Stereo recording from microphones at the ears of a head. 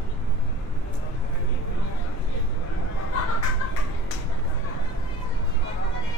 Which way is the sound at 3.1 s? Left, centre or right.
Left.